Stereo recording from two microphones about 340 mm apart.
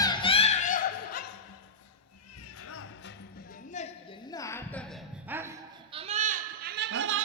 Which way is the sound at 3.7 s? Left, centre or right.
Centre.